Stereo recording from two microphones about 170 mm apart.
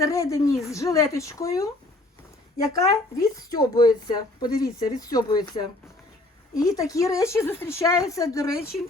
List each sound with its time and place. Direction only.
0.0 s a woman's voice: 20° left (ahead or behind)
2.7 s a woman's voice: 20° left (ahead or behind)